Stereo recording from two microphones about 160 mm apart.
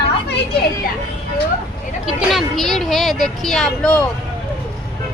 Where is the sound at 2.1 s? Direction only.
5° right (ahead or behind).